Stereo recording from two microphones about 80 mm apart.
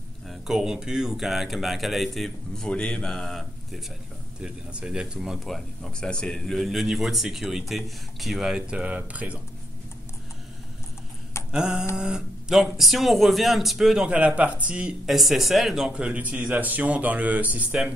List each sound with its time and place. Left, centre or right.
0.3 s speech: centre
4.4 s speech: centre
11.5 s a sound: centre
12.0 s speech: centre
15.9 s speech: centre